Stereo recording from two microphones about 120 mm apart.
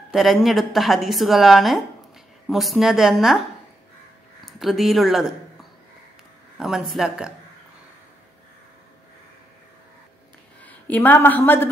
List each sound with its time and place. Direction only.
0.1 s a woman's voice: centre (ahead or behind)
4.5 s a woman's voice: centre (ahead or behind)
10.6 s a woman's voice: 15° left (ahead or behind)